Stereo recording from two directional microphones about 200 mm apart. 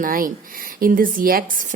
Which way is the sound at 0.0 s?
45° right (ahead or behind).